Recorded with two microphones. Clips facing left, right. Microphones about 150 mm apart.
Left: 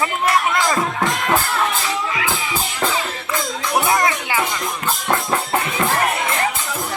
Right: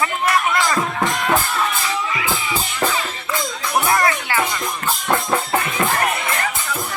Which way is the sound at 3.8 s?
15° left (ahead or behind).